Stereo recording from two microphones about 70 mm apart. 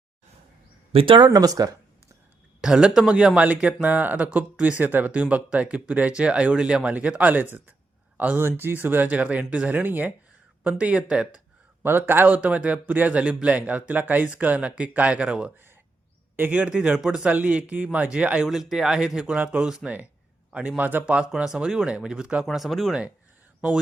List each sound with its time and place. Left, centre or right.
1.2 s speech: right
2.6 s speech: centre
11.8 s a man's voice: right; by 18.4 s centre
18.4 s speech: centre
22.4 s speech: centre